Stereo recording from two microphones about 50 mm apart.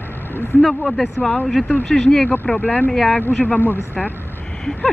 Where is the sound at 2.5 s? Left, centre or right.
Left.